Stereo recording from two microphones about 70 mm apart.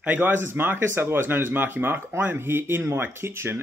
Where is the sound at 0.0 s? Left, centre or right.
Right.